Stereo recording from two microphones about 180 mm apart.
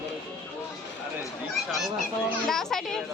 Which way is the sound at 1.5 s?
Centre (ahead or behind).